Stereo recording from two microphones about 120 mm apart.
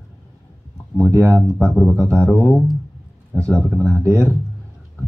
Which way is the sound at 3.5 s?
Centre (ahead or behind).